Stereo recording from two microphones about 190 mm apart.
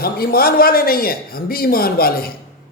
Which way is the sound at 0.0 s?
55° left (ahead or behind).